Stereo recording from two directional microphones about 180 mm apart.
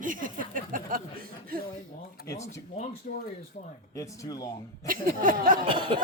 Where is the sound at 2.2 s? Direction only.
55° left (ahead or behind).